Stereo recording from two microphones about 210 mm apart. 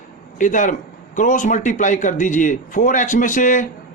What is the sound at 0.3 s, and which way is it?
Speech, 35° left (ahead or behind).